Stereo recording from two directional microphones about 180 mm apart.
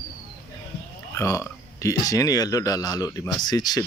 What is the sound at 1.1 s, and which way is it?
Speech, 15° left (ahead or behind).